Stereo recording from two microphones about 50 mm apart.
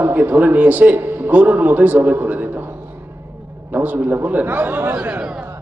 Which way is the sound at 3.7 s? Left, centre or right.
Right.